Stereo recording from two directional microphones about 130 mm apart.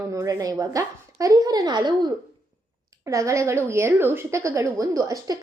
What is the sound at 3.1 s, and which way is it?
A woman's voice, 25° right (ahead or behind).